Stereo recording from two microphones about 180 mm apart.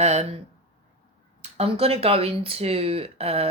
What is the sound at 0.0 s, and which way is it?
Speech, 40° right (ahead or behind).